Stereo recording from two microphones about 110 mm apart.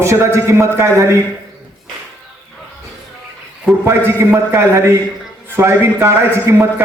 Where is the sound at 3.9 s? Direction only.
25° right (ahead or behind).